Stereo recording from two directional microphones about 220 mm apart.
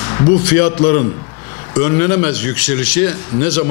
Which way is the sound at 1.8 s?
15° left (ahead or behind).